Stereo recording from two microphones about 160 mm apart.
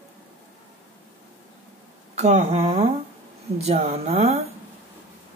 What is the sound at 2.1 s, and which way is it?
Speech, 45° right (ahead or behind).